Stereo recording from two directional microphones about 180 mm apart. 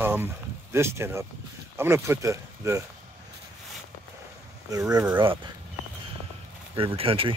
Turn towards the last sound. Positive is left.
turn(degrees=-30)  # may be behind; listen again after turning